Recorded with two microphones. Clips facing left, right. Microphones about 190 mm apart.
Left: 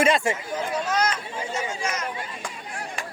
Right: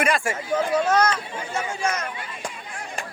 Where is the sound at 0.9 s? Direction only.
55° right (ahead or behind).